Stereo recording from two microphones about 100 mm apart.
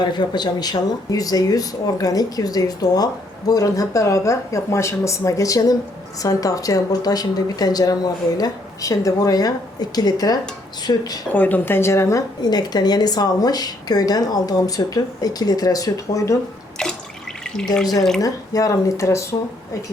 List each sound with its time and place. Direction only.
0.0 s speech: 50° left (ahead or behind)
11.3 s speech: 15° left (ahead or behind)
12.4 s speech: 45° left (ahead or behind)
16.8 s drip: 10° left (ahead or behind)
18.2 s speech: 35° left (ahead or behind)